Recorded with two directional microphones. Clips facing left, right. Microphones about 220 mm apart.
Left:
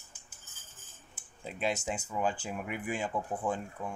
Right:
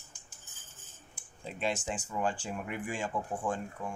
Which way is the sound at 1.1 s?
5° left (ahead or behind).